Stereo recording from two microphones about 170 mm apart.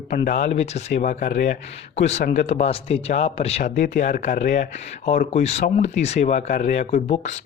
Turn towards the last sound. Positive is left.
turn(degrees=40)  # may be behind; listen again after turning